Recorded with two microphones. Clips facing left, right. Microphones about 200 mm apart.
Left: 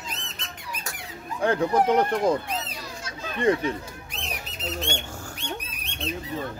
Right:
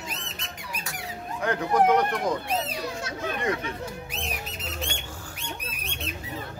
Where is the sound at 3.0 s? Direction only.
65° right (ahead or behind).